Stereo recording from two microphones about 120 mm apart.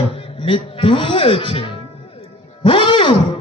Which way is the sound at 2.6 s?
45° left (ahead or behind).